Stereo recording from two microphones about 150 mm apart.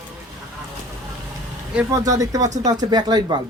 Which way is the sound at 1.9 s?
25° right (ahead or behind).